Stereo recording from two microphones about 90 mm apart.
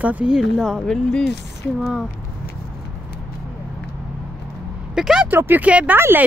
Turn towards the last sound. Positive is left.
turn(degrees=-25)  # may be behind; listen again after turning